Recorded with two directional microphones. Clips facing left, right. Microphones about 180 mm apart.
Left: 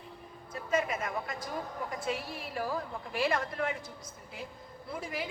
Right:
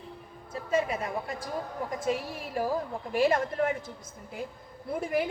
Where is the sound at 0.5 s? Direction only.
30° right (ahead or behind).